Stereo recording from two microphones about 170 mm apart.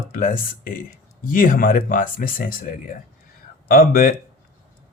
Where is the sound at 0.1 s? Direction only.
55° left (ahead or behind).